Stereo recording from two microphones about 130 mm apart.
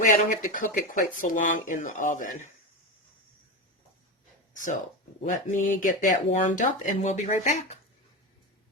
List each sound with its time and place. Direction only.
0.1 s speech: 90° left
5.3 s speech: 90° left; by 7.8 s 65° left (ahead or behind)